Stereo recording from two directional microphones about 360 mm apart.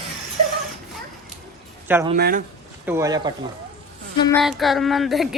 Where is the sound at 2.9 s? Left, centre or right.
Centre.